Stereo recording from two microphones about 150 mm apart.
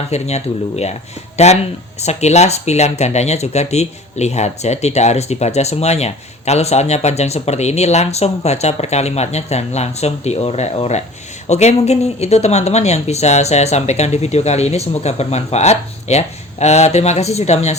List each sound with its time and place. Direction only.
0.1 s speech: 45° left (ahead or behind)